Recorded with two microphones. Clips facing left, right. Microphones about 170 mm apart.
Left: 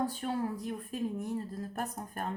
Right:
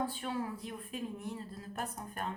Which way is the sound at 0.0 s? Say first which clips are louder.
Left 4 dB; 40° left (ahead or behind).